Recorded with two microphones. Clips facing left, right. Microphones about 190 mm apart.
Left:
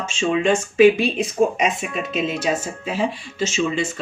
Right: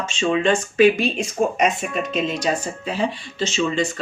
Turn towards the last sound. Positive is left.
turn(degrees=10)  # may be behind; listen again after turning